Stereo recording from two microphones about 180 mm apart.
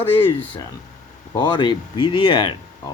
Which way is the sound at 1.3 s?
25° left (ahead or behind).